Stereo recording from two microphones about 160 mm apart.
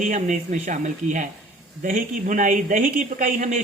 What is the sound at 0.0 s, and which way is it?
A man's voice, 50° right (ahead or behind).